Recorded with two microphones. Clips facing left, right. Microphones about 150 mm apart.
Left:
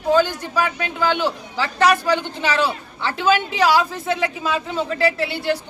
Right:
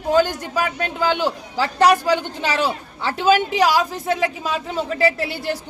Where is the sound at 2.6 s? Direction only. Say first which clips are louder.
Right 1 dB; 40° right (ahead or behind).